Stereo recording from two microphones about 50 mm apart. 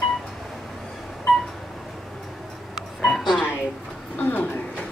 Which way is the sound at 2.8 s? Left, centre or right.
Centre.